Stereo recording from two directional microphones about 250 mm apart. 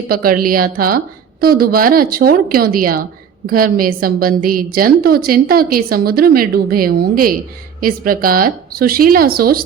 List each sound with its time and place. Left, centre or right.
0.1 s a woman's voice: right